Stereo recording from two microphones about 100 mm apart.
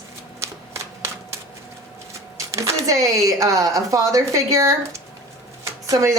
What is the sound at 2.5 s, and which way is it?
Speech, 30° right (ahead or behind).